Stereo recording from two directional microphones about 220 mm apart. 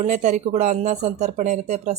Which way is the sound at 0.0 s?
35° right (ahead or behind).